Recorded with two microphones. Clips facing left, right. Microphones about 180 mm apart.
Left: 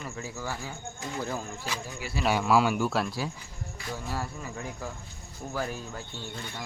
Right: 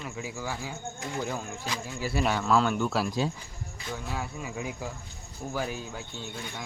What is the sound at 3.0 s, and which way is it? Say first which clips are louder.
Speech: right 4 dB; 20° right (ahead or behind).